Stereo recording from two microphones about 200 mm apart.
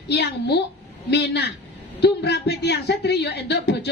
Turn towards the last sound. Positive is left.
turn(degrees=55)  # may be behind; listen again after turning